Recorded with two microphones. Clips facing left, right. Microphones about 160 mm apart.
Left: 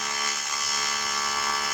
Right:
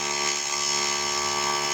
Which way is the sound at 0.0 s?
25° right (ahead or behind).